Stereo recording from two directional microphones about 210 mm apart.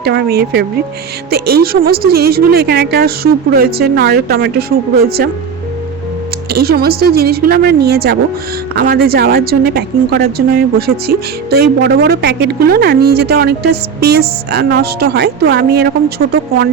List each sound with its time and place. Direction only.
0.0 s speech: 50° right (ahead or behind)
6.5 s speech: 45° right (ahead or behind)